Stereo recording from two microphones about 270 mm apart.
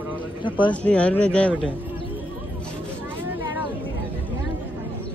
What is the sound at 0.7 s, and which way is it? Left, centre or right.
Speech, centre.